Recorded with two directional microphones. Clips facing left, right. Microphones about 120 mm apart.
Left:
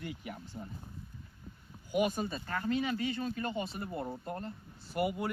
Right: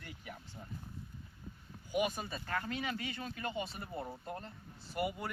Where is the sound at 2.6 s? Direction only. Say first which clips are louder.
Left 7 dB; 25° left (ahead or behind).